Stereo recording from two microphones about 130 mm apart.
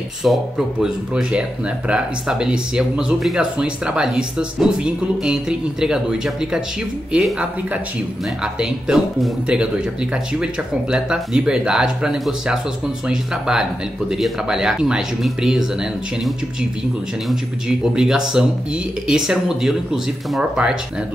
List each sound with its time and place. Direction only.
0.2 s a woman's voice: 5° right (ahead or behind)
17.3 s speech: 5° right (ahead or behind)